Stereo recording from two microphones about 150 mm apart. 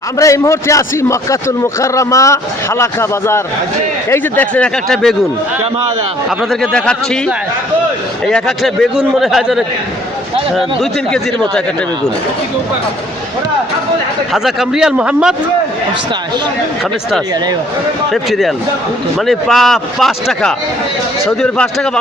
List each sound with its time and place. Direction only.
0.2 s a man's voice: 20° left (ahead or behind); by 5.1 s 5° left (ahead or behind)
6.5 s speech: 5° left (ahead or behind)
8.3 s speech: centre (ahead or behind)
14.3 s speech: 5° right (ahead or behind)
18.1 s speech: centre (ahead or behind)